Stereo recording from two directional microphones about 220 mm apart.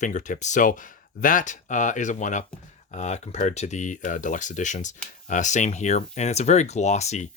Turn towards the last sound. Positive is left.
turn(degrees=30)  # may be behind; listen again after turning